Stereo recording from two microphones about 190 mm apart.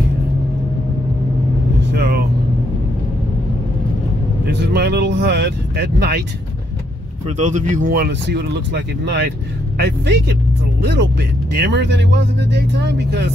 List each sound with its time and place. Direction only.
1.9 s vehicle: 55° right (ahead or behind)
4.5 s speech: 60° right (ahead or behind)
7.2 s speech: 40° right (ahead or behind); by 13.3 s 60° right (ahead or behind)